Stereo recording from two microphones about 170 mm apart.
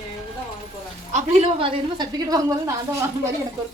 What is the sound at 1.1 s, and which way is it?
A woman's voice, 40° right (ahead or behind).